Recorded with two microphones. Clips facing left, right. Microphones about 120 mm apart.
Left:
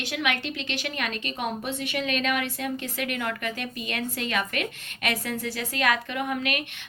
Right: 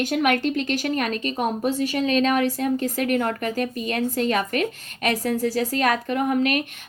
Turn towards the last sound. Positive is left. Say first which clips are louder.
# right 7 dB
turn(degrees=-40)  # may be behind; listen again after turning